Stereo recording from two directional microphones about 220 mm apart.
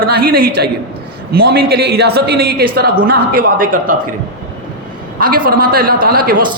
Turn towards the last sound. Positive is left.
turn(degrees=-40)  # may be behind; listen again after turning